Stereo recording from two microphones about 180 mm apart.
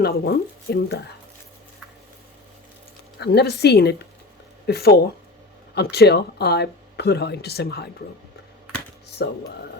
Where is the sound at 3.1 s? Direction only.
65° left (ahead or behind).